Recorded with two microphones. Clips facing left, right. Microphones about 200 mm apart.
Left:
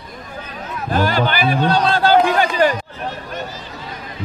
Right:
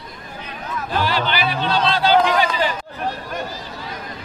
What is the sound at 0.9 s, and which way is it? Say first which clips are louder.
Speech: left 4 dB; 50° left (ahead or behind).